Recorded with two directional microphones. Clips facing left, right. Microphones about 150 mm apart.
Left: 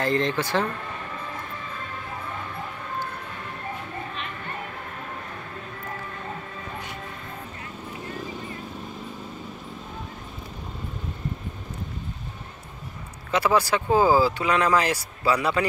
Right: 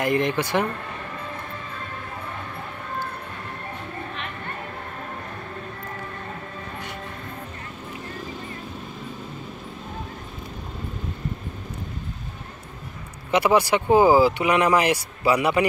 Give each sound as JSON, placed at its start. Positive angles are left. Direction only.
{"t": 0.0, "sound": "speech", "side_deg": -15}
{"t": 13.3, "sound": "speech", "side_deg": -15}